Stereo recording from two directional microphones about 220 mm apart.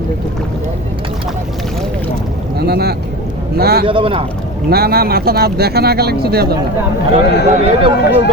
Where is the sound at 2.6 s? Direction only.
45° right (ahead or behind).